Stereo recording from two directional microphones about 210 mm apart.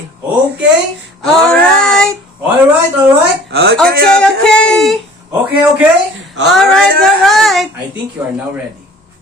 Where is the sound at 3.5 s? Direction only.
50° right (ahead or behind).